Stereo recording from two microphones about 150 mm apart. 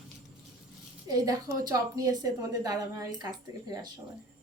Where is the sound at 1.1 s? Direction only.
25° right (ahead or behind).